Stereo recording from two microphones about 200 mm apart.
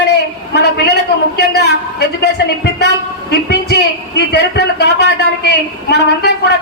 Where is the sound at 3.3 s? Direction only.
55° left (ahead or behind).